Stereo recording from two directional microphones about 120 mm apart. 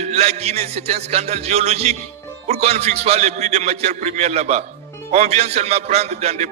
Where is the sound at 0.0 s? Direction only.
65° right (ahead or behind).